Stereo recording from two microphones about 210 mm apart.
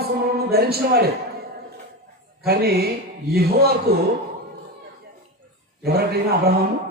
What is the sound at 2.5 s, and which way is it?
A man's voice, 50° right (ahead or behind).